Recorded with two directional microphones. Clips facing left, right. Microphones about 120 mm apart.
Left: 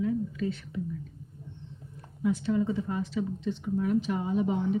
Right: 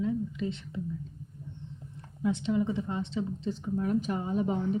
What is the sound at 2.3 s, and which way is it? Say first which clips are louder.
A woman's voice: left 1 dB; 20° right (ahead or behind).